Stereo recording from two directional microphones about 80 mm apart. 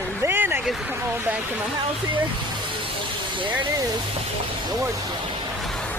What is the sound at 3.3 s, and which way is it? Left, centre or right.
Speech, right.